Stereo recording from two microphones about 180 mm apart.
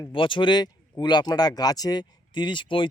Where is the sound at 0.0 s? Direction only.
25° left (ahead or behind).